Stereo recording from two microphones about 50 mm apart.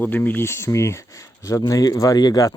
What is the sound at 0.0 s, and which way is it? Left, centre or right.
Speech, left.